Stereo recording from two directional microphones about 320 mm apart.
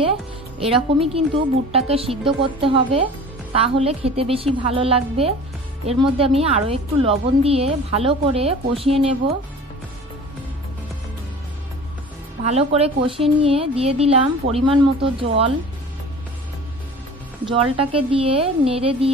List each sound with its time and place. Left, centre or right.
0.6 s a woman's voice: centre
12.4 s a woman's voice: centre
17.5 s a woman's voice: centre